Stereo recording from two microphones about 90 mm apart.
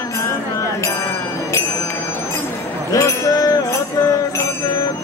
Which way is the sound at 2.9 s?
35° left (ahead or behind).